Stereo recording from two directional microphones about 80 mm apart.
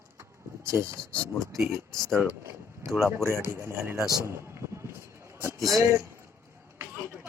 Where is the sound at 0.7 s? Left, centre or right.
Right.